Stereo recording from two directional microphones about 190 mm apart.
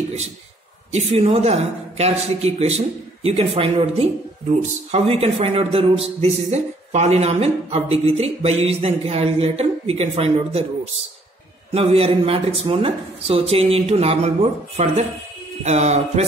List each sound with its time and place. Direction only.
0.9 s speech: 30° right (ahead or behind)
11.7 s speech: 30° right (ahead or behind)